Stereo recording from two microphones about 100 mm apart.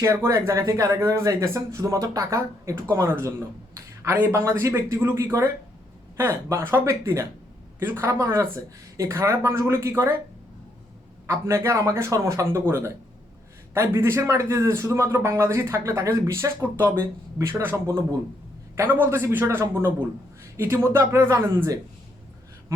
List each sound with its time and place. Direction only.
0.0 s speech: 30° right (ahead or behind)
2.9 s a man's voice: 25° right (ahead or behind)
11.3 s a man's voice: 30° right (ahead or behind)